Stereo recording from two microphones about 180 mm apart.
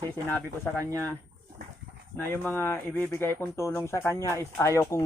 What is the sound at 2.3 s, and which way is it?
Speech, 10° left (ahead or behind).